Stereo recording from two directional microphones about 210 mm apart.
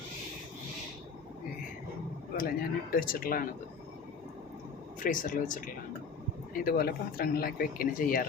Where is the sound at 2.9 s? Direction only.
45° left (ahead or behind).